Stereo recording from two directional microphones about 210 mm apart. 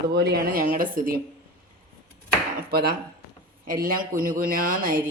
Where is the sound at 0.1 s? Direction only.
50° right (ahead or behind).